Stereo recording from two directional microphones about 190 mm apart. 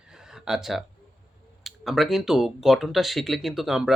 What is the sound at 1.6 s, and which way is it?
Speech, centre (ahead or behind).